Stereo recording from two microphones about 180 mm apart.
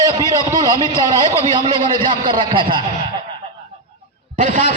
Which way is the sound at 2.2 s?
25° right (ahead or behind).